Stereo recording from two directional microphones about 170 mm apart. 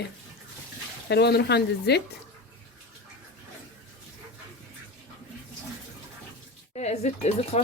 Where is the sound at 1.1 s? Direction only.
80° left.